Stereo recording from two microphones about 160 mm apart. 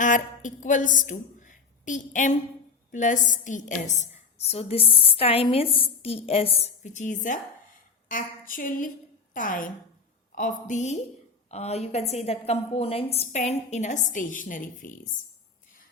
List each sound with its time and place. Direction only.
0.0 s a woman's voice: 50° left (ahead or behind)